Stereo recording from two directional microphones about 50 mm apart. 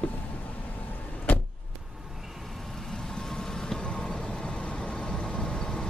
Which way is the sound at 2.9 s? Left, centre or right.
Centre.